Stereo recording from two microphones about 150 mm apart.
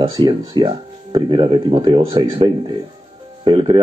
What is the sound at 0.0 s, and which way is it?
Speech, 30° right (ahead or behind).